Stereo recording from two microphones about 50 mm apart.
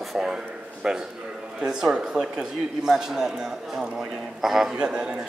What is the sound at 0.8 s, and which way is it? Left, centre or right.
A man's voice, centre.